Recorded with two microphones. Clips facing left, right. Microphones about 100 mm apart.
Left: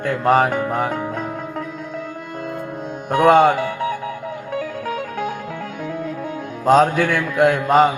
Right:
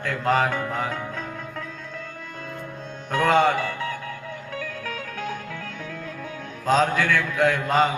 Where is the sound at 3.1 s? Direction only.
50° left (ahead or behind).